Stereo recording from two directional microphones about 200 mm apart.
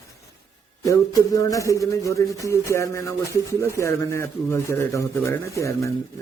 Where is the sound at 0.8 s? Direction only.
15° left (ahead or behind).